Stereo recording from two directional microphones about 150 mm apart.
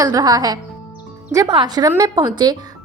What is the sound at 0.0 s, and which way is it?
A woman's voice, 25° right (ahead or behind).